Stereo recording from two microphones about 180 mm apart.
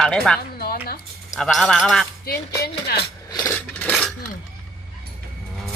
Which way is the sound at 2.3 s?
60° left (ahead or behind).